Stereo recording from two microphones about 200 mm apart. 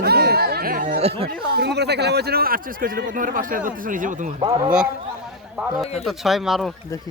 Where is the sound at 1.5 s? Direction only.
55° right (ahead or behind); by 4.3 s 40° right (ahead or behind).